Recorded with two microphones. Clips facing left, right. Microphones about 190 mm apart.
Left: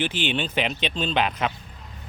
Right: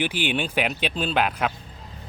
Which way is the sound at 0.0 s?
10° right (ahead or behind).